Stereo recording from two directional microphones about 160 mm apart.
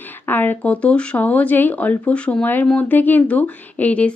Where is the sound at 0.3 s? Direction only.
10° left (ahead or behind).